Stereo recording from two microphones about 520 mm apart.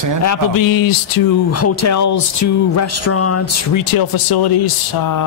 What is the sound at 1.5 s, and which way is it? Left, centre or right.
Speech, left.